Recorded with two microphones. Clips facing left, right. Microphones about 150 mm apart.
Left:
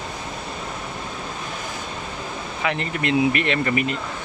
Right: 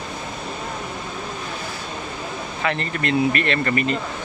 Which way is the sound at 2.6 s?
15° left (ahead or behind).